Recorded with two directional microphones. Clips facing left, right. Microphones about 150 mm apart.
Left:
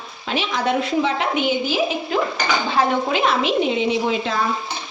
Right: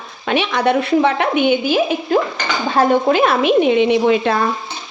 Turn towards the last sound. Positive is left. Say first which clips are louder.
# right 7 dB
turn(degrees=-60)  # may be behind; listen again after turning